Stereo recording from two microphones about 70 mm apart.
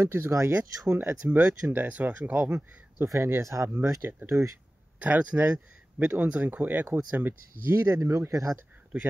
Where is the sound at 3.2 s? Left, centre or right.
Right.